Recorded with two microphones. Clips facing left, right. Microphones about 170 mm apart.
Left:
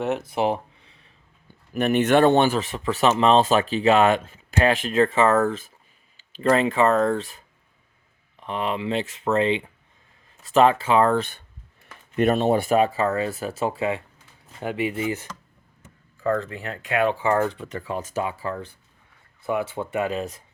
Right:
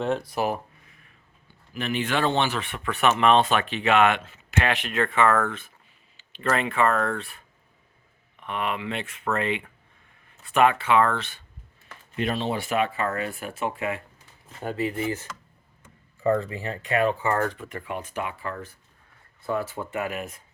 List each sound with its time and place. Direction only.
0.3 s speech: 25° left (ahead or behind)
1.5 s speech: 50° left (ahead or behind)
2.7 s speech: 30° left (ahead or behind)
8.4 s speech: 30° left (ahead or behind)
12.1 s speech: 50° left (ahead or behind); by 14.0 s 30° left (ahead or behind)
14.8 s speech: 20° left (ahead or behind)
16.2 s speech: 10° right (ahead or behind)
17.2 s speech: 15° left (ahead or behind)
17.7 s speech: 35° left (ahead or behind)
19.5 s speech: 20° left (ahead or behind)